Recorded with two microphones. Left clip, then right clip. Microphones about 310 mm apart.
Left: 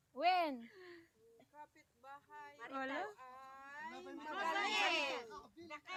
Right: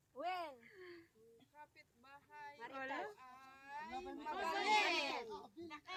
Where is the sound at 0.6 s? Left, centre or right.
Centre.